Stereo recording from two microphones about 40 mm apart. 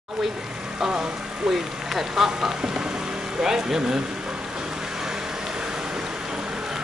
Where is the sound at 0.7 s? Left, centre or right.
Centre.